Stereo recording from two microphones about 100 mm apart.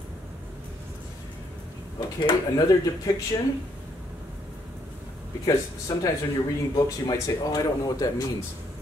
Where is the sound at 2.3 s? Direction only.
40° left (ahead or behind).